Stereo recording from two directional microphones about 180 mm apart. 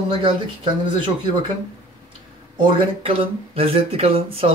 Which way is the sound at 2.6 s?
30° right (ahead or behind).